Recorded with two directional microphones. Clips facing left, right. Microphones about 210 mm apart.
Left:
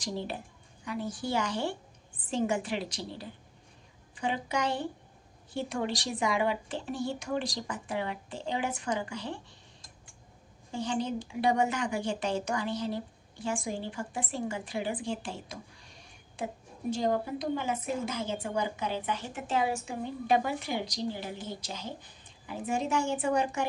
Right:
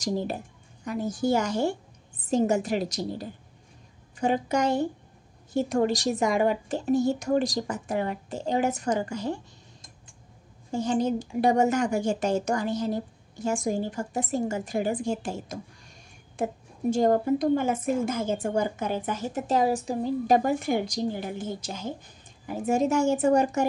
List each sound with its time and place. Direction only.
0.0 s a woman's voice: 45° right (ahead or behind)
10.7 s a woman's voice: 45° right (ahead or behind)